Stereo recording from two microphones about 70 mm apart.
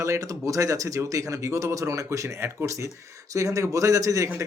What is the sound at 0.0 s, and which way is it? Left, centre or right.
Speech, right.